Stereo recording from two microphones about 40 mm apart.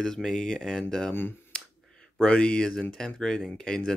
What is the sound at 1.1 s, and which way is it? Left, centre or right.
Speech, left.